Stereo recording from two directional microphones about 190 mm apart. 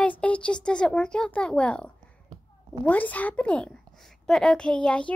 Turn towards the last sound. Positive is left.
turn(degrees=5)  # may be behind; listen again after turning